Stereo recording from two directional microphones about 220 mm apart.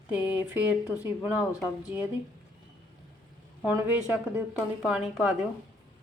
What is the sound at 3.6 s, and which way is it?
A woman's voice, 5° right (ahead or behind).